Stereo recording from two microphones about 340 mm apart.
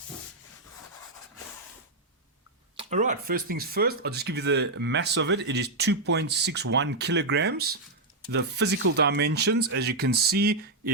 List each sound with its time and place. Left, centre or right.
2.7 s speech: right